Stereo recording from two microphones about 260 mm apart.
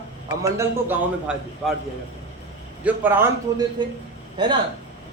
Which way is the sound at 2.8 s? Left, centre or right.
Centre.